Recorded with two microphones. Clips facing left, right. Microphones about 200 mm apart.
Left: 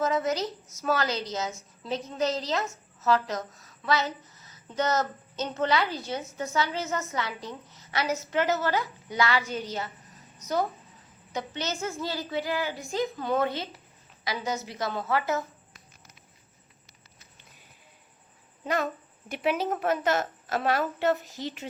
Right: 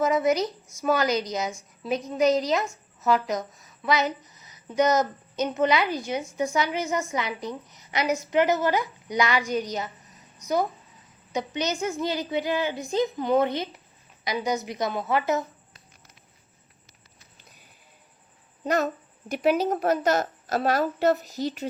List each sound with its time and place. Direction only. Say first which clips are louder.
0.0 s a woman's voice: right 4 dB; 10° right (ahead or behind)
18.6 s a child's voice: right 4 dB; 45° right (ahead or behind)